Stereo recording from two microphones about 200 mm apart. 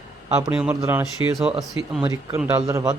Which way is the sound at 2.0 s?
15° right (ahead or behind).